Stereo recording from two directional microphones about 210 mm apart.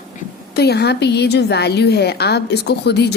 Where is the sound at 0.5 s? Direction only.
50° left (ahead or behind).